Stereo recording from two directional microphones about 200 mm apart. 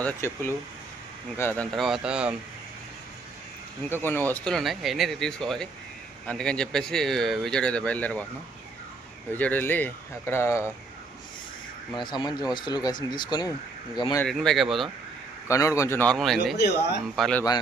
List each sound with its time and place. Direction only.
0.0 s speech: 10° left (ahead or behind)
1.7 s speech: centre (ahead or behind)
4.0 s speech: 10° left (ahead or behind)
9.3 s speech: 10° left (ahead or behind)
11.9 s speech: 20° left (ahead or behind)
14.3 s speech: centre (ahead or behind)
15.4 s speech: 15° left (ahead or behind)
16.6 s speech: 55° left (ahead or behind)
17.2 s speech: 5° left (ahead or behind)